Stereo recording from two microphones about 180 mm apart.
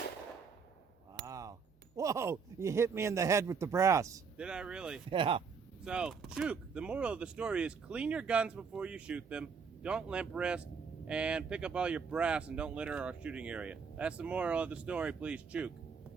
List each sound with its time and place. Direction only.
1.1 s a sound: 20° right (ahead or behind)
2.0 s speech: 15° right (ahead or behind)
4.4 s speech: 5° right (ahead or behind)
5.1 s speech: 30° right (ahead or behind)
5.8 s speech: 5° right (ahead or behind)